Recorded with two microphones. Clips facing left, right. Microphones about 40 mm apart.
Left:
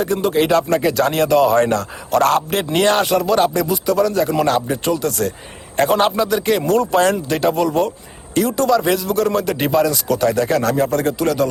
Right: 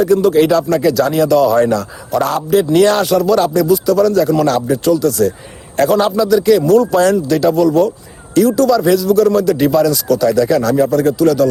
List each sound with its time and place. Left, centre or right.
0.0 s a man's voice: left
2.1 s a man's voice: left